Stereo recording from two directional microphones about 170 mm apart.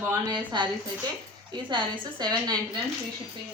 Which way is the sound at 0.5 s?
25° right (ahead or behind).